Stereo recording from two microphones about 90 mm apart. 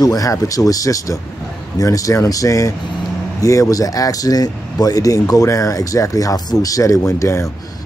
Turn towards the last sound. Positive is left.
turn(degrees=35)  # may be behind; listen again after turning